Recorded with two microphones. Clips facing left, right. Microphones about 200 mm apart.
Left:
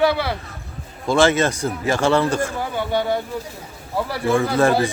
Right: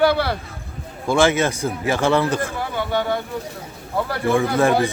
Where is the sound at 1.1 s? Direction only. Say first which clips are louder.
Left 1 dB; 15° right (ahead or behind).